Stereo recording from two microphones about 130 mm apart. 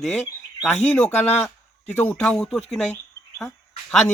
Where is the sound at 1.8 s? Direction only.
10° left (ahead or behind).